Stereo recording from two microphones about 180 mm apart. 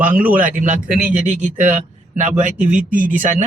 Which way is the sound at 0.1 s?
10° right (ahead or behind).